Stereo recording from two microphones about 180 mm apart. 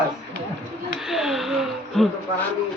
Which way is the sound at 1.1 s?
Centre (ahead or behind).